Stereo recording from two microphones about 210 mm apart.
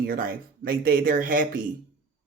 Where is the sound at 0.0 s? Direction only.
45° right (ahead or behind).